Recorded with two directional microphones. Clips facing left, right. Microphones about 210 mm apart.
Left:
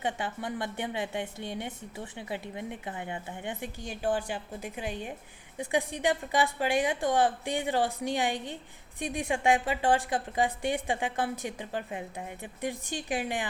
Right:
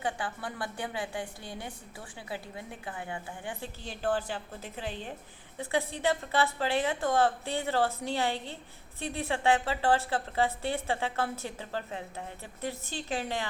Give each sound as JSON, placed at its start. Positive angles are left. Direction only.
{"t": 0.0, "sound": "a woman's voice", "side_deg": 20}